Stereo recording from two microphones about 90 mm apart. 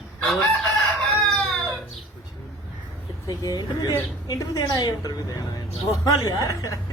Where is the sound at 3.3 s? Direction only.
45° left (ahead or behind).